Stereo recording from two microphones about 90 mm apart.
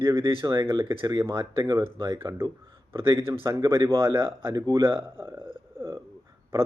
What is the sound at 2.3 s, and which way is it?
Speech, 40° right (ahead or behind).